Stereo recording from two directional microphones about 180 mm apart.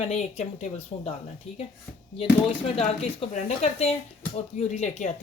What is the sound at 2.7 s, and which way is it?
Speech, 35° left (ahead or behind).